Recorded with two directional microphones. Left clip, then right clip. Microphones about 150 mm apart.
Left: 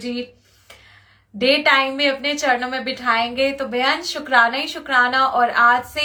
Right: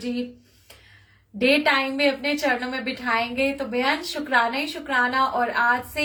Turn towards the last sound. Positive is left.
turn(degrees=-15)  # may be behind; listen again after turning